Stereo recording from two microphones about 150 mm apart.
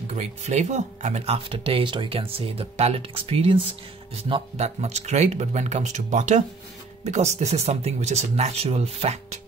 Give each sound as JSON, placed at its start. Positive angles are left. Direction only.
{"t": 0.1, "sound": "speech", "side_deg": -45}
{"t": 4.6, "sound": "speech", "side_deg": -50}